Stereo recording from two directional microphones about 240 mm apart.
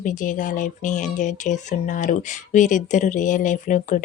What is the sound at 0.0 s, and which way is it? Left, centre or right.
Speech, left.